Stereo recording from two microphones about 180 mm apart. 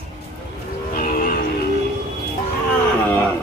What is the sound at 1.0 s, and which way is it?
Music, 50° left (ahead or behind).